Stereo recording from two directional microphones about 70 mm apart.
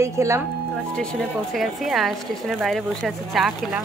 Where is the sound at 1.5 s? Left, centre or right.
Centre.